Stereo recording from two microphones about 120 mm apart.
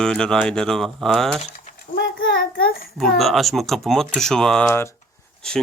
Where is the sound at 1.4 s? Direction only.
90° left.